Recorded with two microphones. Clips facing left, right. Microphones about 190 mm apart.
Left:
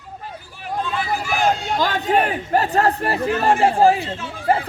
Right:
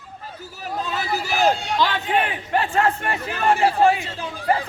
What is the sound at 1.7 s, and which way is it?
Speech, 45° left (ahead or behind).